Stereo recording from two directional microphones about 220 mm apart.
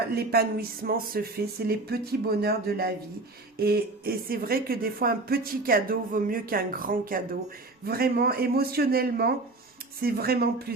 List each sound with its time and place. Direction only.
0.1 s speech: 45° right (ahead or behind)